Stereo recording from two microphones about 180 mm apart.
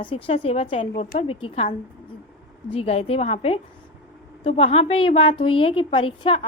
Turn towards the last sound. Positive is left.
turn(degrees=30)  # may be behind; listen again after turning